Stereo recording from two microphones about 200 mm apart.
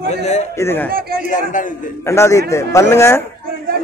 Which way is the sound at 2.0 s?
15° left (ahead or behind).